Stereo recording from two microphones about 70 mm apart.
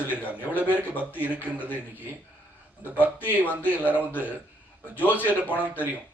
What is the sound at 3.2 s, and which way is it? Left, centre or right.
A man's voice, left.